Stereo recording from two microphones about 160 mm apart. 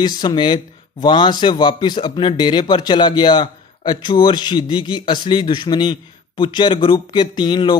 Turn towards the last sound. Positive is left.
turn(degrees=30)  # may be behind; listen again after turning